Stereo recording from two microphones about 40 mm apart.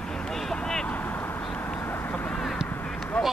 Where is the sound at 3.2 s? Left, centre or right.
Left.